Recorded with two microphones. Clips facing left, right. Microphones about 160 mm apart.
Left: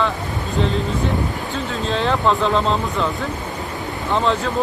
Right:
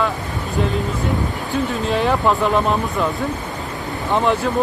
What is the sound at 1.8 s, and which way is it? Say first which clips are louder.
Speech: even; 10° right (ahead or behind).